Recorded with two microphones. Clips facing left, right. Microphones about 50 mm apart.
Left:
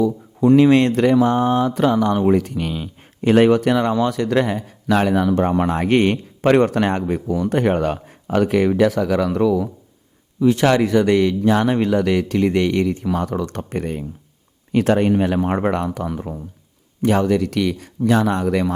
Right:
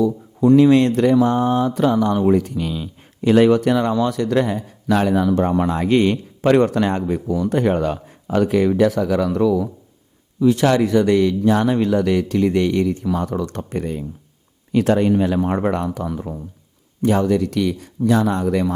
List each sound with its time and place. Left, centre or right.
0.4 s a man's voice: left